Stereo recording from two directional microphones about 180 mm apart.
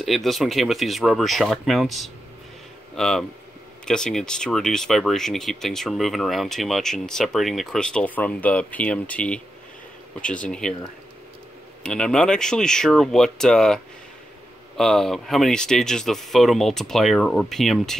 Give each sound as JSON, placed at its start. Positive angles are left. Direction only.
{"t": 0.0, "sound": "speech", "side_deg": 0}
{"t": 11.8, "sound": "speech", "side_deg": 5}
{"t": 14.8, "sound": "speech", "side_deg": 0}